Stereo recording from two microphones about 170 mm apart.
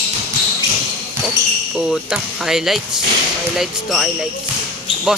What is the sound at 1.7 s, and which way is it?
Music, 5° right (ahead or behind).